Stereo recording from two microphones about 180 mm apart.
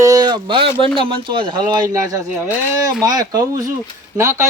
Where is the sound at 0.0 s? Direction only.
20° right (ahead or behind).